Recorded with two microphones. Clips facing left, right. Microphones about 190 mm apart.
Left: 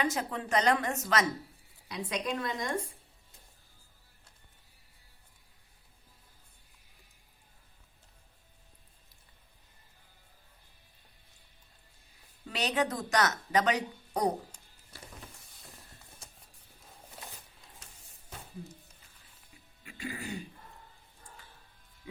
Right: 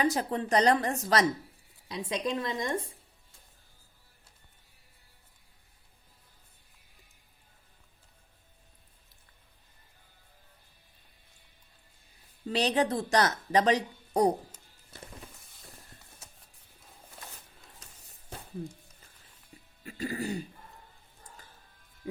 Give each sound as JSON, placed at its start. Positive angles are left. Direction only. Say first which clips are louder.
{"t": 0.0, "sound": "a woman's voice", "louder": "right 4 dB", "side_deg": -35}
{"t": 12.5, "sound": "speech", "louder": "right 4 dB", "side_deg": -30}
{"t": 19.8, "sound": "music", "louder": "right 6 dB", "side_deg": -40}
{"t": 22.0, "sound": "music", "louder": "right 9 dB", "side_deg": -45}